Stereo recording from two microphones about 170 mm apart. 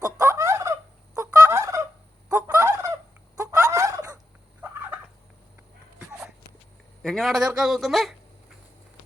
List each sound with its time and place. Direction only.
0.0 s turkey: 20° right (ahead or behind)
7.0 s speech: centre (ahead or behind)